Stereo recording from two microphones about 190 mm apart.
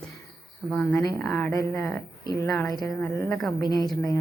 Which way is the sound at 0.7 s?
10° left (ahead or behind).